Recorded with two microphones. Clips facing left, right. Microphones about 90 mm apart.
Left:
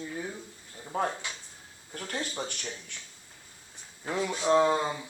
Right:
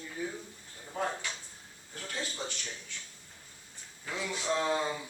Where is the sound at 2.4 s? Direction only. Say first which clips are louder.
Left 3 dB; 55° left (ahead or behind).